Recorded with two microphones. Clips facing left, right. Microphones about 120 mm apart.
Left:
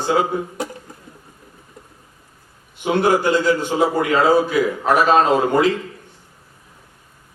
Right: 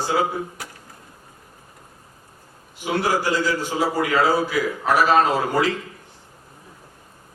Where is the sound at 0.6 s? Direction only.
25° left (ahead or behind).